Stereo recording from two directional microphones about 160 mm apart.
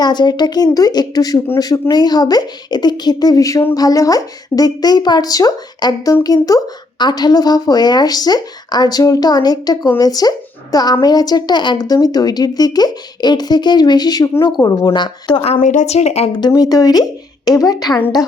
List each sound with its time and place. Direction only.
0.0 s speech: 25° left (ahead or behind)
15.6 s speech: 50° left (ahead or behind)
16.4 s speech: 25° left (ahead or behind)